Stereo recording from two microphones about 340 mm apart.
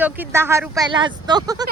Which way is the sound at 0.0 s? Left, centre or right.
Centre.